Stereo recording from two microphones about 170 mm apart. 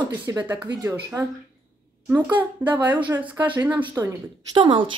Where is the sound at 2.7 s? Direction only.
10° right (ahead or behind).